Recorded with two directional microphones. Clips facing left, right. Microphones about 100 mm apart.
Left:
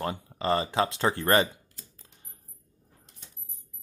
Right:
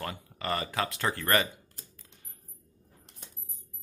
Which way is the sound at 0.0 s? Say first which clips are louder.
Left 6 dB; 25° left (ahead or behind).